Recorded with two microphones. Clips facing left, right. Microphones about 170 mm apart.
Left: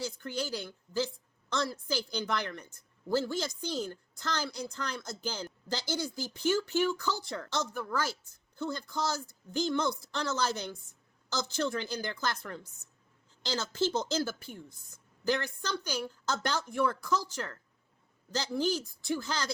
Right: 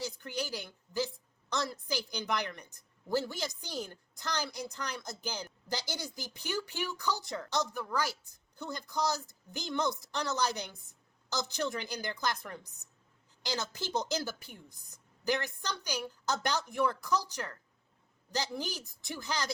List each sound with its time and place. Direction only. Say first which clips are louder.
0.0 s a woman's voice: left 2 dB; 15° right (ahead or behind)